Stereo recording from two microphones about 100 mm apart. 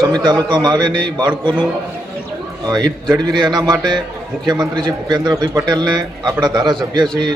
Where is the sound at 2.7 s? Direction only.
45° right (ahead or behind).